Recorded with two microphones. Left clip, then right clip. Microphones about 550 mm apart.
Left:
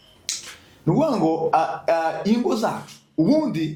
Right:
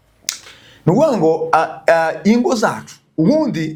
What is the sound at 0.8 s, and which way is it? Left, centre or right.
A man's voice, right.